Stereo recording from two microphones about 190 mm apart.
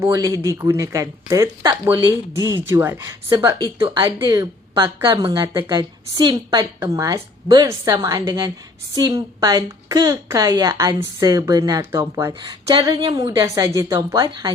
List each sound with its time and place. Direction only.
0.0 s a woman's voice: 15° right (ahead or behind)